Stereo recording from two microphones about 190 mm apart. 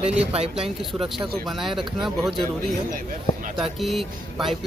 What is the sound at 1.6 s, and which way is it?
Speech, centre (ahead or behind).